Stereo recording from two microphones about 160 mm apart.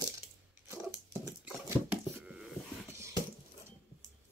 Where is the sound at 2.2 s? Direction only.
5° right (ahead or behind).